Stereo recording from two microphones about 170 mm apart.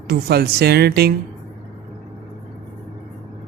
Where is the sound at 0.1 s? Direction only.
70° right (ahead or behind).